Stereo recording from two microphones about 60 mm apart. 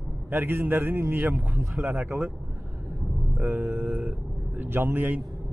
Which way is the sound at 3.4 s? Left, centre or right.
Right.